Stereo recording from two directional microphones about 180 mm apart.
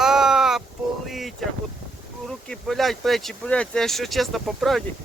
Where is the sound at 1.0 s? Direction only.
Centre (ahead or behind).